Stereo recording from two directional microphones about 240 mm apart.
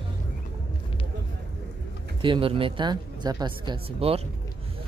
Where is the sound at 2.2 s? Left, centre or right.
Right.